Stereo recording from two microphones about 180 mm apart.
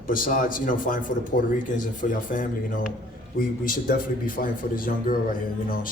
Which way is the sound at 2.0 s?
50° left (ahead or behind).